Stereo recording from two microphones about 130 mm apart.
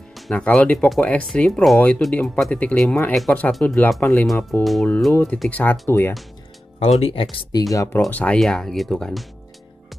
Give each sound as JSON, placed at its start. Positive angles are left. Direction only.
{"t": 0.1, "sound": "speech", "side_deg": 5}
{"t": 4.3, "sound": "speech", "side_deg": 0}
{"t": 5.1, "sound": "speech", "side_deg": 10}
{"t": 6.8, "sound": "speech", "side_deg": 50}
{"t": 7.7, "sound": "speech", "side_deg": 25}
{"t": 8.1, "sound": "speech", "side_deg": 10}